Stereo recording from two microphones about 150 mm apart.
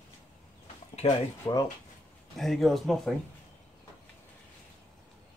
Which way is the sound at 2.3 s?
Centre (ahead or behind).